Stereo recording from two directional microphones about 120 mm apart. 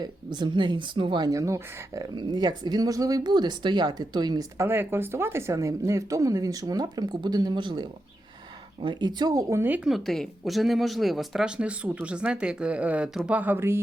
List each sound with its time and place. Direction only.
0.0 s speech: 35° right (ahead or behind)
2.1 s speech: 35° right (ahead or behind)
4.5 s speech: 20° right (ahead or behind)
9.9 s speech: centre (ahead or behind); by 13.8 s 20° right (ahead or behind)